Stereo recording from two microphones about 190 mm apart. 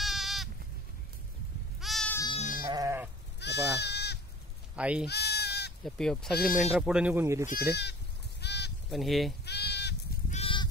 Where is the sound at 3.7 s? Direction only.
60° left (ahead or behind).